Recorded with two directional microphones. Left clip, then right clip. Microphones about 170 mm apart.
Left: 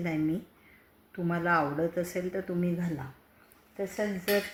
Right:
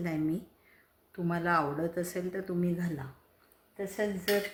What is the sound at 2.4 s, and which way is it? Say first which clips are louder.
Speech: left 1 dB; 30° left (ahead or behind).